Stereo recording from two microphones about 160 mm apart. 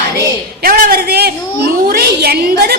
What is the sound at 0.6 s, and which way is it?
A woman's voice, 60° right (ahead or behind).